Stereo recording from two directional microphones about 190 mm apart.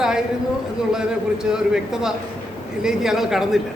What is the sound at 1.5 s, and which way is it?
Speech, 5° right (ahead or behind).